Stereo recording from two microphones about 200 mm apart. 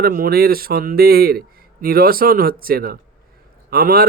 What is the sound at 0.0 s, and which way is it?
Speech, 50° right (ahead or behind).